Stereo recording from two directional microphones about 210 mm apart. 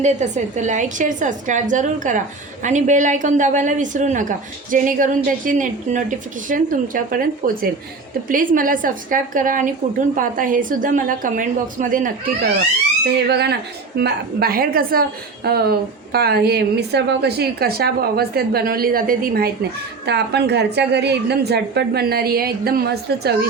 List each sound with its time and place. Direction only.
0.0 s a woman's voice: 35° right (ahead or behind)
13.1 s a woman's voice: 50° right (ahead or behind)